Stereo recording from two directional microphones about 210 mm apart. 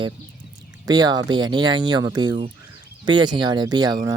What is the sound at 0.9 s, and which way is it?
Speech, 20° right (ahead or behind).